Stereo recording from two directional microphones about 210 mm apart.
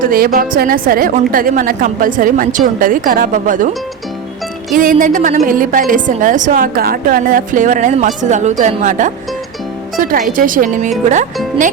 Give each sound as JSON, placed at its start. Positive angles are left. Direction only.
{"t": 0.0, "sound": "a woman's voice", "side_deg": -45}
{"t": 4.7, "sound": "a woman's voice", "side_deg": -40}